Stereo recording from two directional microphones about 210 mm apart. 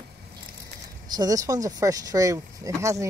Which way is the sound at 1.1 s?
20° right (ahead or behind).